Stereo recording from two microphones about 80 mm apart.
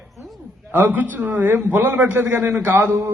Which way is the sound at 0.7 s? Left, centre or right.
Right.